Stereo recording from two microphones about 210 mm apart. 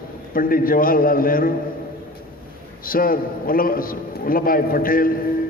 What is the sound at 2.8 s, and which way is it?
A man's voice, 45° left (ahead or behind).